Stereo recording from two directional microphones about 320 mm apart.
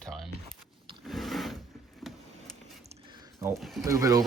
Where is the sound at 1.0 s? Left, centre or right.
Centre.